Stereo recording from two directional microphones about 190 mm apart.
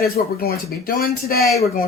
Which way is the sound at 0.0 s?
55° left (ahead or behind).